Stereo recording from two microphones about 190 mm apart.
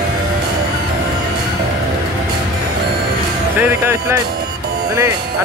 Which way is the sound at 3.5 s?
10° right (ahead or behind).